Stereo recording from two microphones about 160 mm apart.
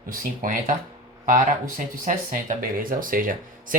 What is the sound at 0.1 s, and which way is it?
Speech, 60° right (ahead or behind).